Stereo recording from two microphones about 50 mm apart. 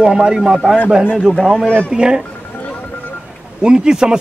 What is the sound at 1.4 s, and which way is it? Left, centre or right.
Speech, centre.